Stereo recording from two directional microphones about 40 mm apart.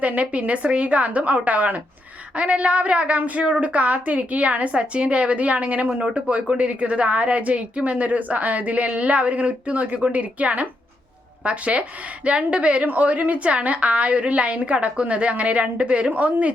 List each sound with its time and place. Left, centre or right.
0.0 s a woman's voice: right